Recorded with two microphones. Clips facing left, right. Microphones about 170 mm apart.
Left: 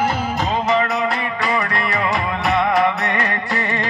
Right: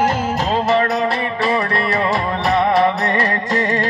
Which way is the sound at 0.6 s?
35° right (ahead or behind).